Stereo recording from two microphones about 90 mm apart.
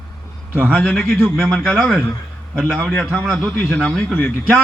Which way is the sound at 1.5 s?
10° left (ahead or behind).